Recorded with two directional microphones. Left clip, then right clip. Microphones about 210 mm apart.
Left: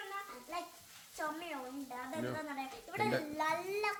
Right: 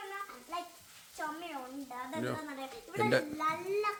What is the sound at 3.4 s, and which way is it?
Speech, 35° left (ahead or behind).